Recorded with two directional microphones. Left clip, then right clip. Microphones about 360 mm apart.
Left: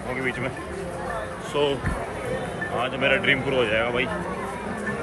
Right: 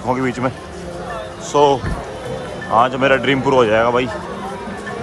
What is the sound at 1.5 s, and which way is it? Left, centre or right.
Speech, centre.